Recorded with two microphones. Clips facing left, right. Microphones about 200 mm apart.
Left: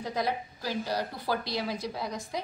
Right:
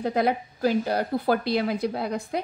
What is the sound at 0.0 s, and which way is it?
A woman's voice, 60° right (ahead or behind).